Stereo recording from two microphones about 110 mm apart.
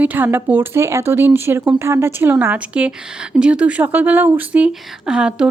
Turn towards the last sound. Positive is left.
turn(degrees=-10)  # may be behind; listen again after turning